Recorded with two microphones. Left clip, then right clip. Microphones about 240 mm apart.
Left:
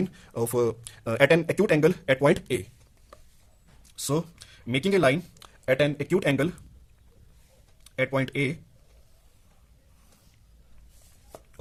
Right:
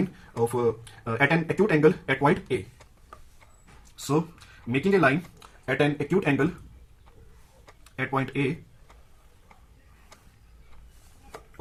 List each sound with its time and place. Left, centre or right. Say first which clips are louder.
0.4 s speech: right 1 dB; left
4.7 s speech: even; left
7.9 s speech: left 2 dB; left